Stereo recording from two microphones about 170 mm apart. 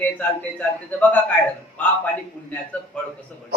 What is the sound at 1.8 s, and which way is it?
A man's voice, 10° left (ahead or behind).